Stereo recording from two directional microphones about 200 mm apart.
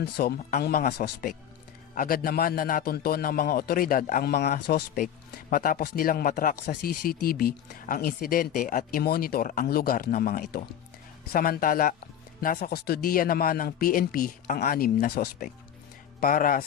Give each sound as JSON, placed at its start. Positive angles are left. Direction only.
{"t": 0.0, "sound": "speech", "side_deg": 50}